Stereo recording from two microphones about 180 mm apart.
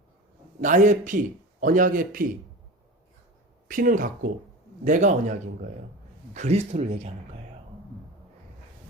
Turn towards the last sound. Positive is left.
turn(degrees=-35)  # may be behind; listen again after turning